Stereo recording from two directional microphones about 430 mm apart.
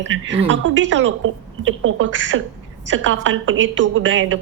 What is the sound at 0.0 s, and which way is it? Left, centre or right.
A woman's voice, right.